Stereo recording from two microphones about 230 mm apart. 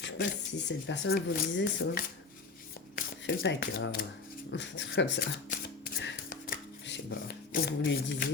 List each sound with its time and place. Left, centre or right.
0.7 s speech: left
5.5 s shuffling cards: left